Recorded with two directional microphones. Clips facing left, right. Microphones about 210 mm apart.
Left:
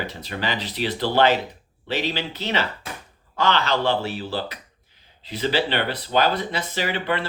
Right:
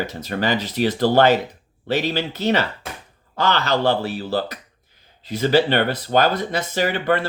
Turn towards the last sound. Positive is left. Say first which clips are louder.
# right 5 dB
turn(degrees=-45)  # may be behind; listen again after turning